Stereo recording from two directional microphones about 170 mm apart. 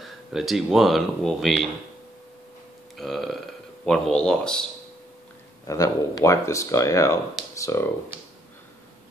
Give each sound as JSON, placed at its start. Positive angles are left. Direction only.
{"t": 0.0, "sound": "speech", "side_deg": 0}
{"t": 3.0, "sound": "speech", "side_deg": 0}
{"t": 5.7, "sound": "speech", "side_deg": 20}